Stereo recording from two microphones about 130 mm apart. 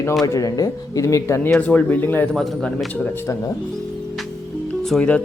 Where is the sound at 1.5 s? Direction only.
10° left (ahead or behind).